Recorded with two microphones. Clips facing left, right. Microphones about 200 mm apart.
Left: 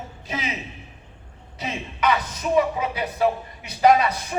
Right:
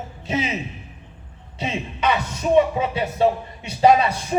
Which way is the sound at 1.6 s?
25° right (ahead or behind).